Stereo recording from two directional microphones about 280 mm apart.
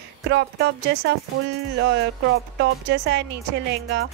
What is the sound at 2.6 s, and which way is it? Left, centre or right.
Speech, right.